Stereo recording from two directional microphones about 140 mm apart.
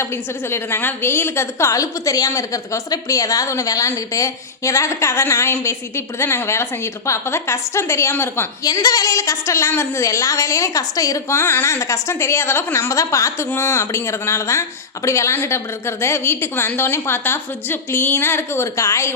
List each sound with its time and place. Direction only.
0.0 s a woman's voice: 20° left (ahead or behind)